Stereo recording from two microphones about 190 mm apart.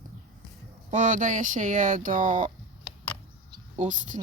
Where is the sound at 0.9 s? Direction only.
40° right (ahead or behind).